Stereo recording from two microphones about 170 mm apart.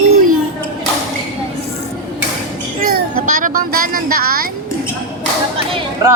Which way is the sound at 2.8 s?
55° right (ahead or behind).